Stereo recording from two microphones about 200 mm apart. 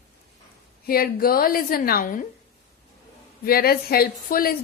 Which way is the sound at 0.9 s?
50° left (ahead or behind).